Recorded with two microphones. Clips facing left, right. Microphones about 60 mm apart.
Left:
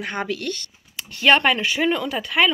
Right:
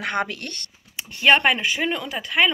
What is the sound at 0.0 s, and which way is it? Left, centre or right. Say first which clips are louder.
Speech: right 3 dB; right.